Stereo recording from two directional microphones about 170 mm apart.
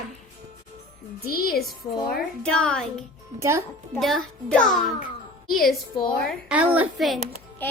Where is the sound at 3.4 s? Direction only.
20° right (ahead or behind).